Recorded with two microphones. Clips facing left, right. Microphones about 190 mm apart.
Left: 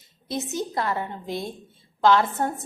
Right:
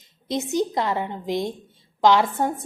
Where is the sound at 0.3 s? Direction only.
15° right (ahead or behind).